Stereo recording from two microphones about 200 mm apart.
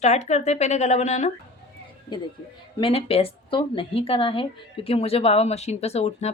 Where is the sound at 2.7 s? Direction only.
30° left (ahead or behind).